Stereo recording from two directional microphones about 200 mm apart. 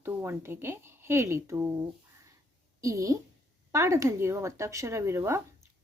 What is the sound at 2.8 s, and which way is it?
Speech, 15° right (ahead or behind).